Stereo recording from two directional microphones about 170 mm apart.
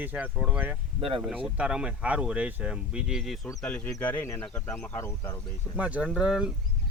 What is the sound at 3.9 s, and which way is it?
Speech, 10° left (ahead or behind).